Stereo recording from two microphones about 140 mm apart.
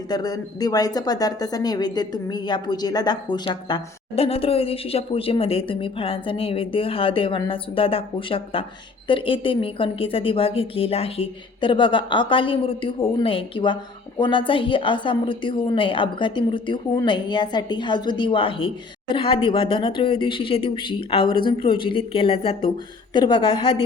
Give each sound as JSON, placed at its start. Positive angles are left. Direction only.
{"t": 0.1, "sound": "speech", "side_deg": 30}